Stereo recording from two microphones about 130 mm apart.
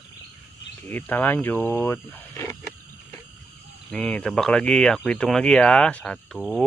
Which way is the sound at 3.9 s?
5° left (ahead or behind).